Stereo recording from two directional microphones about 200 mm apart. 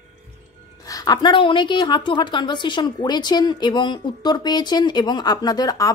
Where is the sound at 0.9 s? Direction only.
20° left (ahead or behind).